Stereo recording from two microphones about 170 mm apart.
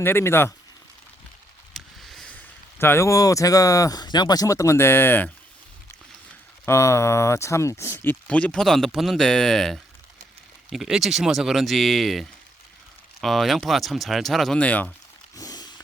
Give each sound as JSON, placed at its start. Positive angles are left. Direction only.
{"t": 0.0, "sound": "speech", "side_deg": 15}
{"t": 1.7, "sound": "speech", "side_deg": 0}
{"t": 6.7, "sound": "speech", "side_deg": 15}
{"t": 15.4, "sound": "a sound", "side_deg": 20}